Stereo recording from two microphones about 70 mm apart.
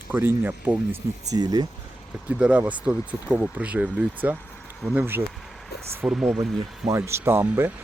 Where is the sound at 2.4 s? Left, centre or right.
Centre.